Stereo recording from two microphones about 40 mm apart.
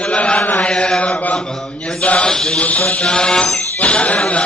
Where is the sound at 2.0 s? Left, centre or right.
Left.